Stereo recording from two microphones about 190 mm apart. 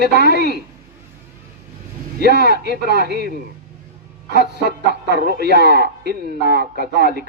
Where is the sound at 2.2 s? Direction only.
60° right (ahead or behind).